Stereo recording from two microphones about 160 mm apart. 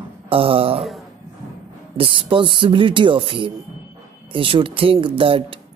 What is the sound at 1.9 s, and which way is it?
Speech, 35° right (ahead or behind).